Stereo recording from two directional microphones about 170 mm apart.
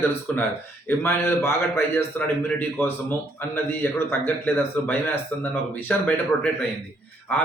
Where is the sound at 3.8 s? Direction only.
10° left (ahead or behind).